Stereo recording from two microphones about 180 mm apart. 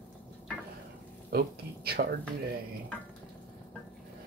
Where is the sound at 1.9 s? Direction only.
65° right (ahead or behind).